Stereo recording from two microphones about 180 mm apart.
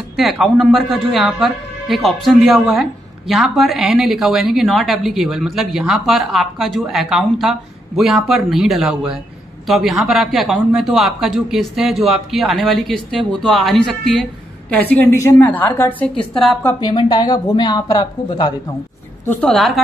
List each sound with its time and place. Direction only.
0.1 s a woman's voice: centre (ahead or behind)
16.8 s speech: 25° left (ahead or behind)
19.2 s speech: 10° left (ahead or behind)